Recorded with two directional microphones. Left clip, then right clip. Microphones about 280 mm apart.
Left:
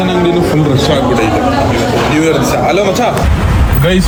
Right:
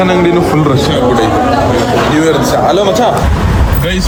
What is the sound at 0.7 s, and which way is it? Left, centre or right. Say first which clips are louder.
Speech: right 1 dB; centre.